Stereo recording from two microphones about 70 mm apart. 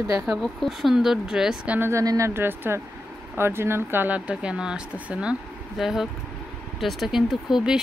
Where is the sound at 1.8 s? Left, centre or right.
Right.